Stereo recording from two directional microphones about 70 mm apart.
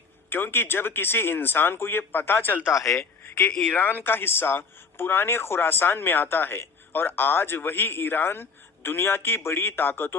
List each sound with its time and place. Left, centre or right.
0.3 s speech: left
2.7 s speech: left
3.2 s speech: left